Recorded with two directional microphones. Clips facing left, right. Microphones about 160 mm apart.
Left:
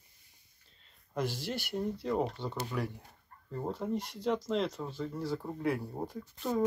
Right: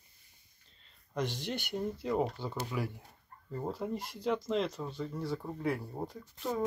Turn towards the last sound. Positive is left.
turn(degrees=0)  # may be behind; listen again after turning